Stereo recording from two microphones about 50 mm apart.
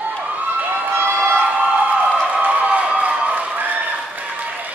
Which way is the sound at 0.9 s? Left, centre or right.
Right.